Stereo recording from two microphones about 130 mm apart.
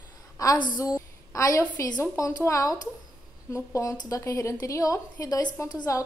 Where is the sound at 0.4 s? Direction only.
30° left (ahead or behind).